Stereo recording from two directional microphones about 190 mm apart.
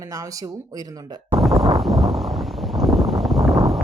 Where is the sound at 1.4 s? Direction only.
Centre (ahead or behind).